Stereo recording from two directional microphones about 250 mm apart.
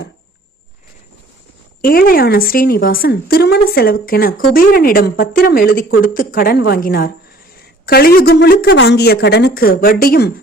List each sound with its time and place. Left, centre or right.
1.8 s a woman's voice: left